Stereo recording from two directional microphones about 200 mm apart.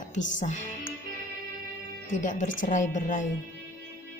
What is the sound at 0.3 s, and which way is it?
Speech, 35° left (ahead or behind).